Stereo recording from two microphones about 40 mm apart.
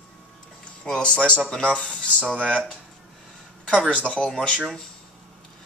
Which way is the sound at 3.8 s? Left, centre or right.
Left.